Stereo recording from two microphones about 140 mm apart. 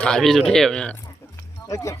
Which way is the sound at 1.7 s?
20° left (ahead or behind).